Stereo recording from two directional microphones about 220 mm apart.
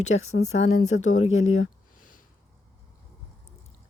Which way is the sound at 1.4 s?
65° left (ahead or behind).